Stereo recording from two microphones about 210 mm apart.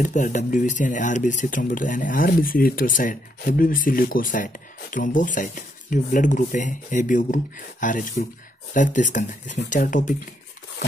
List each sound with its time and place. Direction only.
0.0 s speech: 35° left (ahead or behind)